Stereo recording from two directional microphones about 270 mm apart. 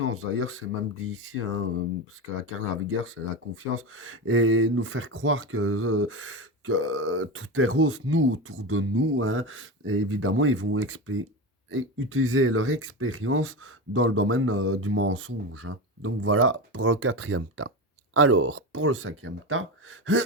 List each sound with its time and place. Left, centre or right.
0.0 s speech: right
2.9 s speech: right